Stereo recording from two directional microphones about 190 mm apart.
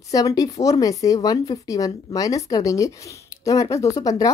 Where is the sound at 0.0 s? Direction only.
20° left (ahead or behind).